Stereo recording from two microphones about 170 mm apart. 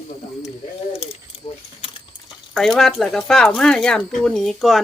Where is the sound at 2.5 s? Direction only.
Centre (ahead or behind).